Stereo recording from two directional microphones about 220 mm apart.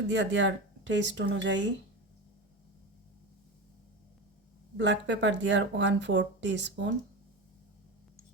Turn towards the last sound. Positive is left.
turn(degrees=-55)  # may be behind; listen again after turning